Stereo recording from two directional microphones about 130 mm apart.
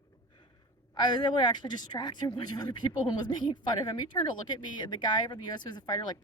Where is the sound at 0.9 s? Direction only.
35° left (ahead or behind).